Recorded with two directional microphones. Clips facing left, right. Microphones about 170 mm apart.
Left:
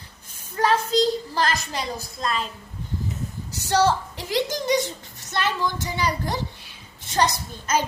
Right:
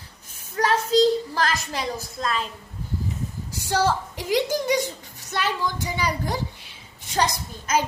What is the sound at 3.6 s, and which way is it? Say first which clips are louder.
A woman's voice: left 2 dB; 10° right (ahead or behind).